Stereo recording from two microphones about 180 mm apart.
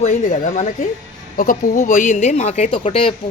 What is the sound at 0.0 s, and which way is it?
A woman's voice, 45° left (ahead or behind).